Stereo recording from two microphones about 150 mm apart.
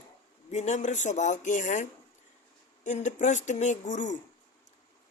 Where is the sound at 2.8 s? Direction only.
55° left (ahead or behind).